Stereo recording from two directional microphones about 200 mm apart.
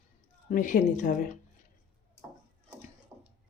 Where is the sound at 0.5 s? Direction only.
40° left (ahead or behind).